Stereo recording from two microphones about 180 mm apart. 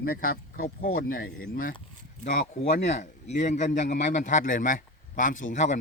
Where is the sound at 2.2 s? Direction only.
40° left (ahead or behind).